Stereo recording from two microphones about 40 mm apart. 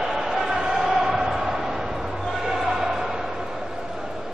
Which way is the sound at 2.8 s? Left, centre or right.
Centre.